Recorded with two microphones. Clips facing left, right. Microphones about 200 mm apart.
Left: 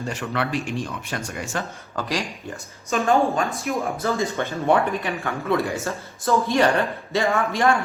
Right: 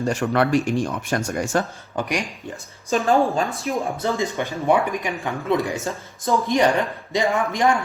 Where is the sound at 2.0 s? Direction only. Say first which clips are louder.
Right 2 dB; 15° right (ahead or behind).